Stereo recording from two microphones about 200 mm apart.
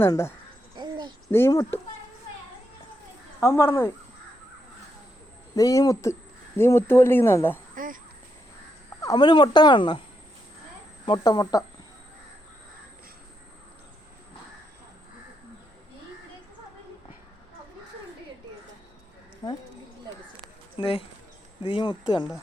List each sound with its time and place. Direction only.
0.0 s speech: 15° left (ahead or behind)
0.8 s a sound: 20° right (ahead or behind)
1.3 s speech: 15° left (ahead or behind)
3.4 s speech: 15° left (ahead or behind)
5.5 s speech: 15° left (ahead or behind)
9.0 s speech: 20° left (ahead or behind)
11.0 s speech: 20° left (ahead or behind)
19.4 s speech: 20° left (ahead or behind)
20.7 s speech: 25° left (ahead or behind)